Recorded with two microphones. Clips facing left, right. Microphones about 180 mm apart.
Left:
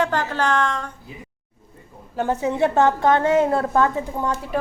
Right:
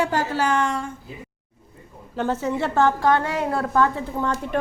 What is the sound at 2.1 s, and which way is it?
A woman's voice, 10° left (ahead or behind).